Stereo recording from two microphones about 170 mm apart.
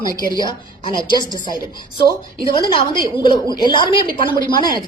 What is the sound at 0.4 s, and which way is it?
A woman's voice, 25° left (ahead or behind).